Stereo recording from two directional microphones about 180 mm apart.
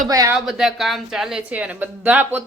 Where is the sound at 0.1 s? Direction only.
20° right (ahead or behind).